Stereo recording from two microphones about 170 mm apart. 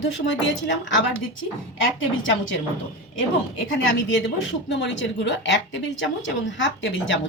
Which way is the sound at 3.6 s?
90° left.